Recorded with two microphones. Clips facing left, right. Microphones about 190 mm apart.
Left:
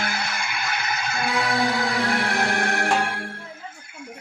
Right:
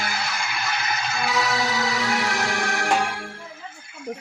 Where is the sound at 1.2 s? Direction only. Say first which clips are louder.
Left 2 dB; 55° left (ahead or behind).